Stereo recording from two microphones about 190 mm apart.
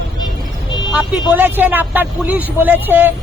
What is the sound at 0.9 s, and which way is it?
A man's voice, 10° right (ahead or behind).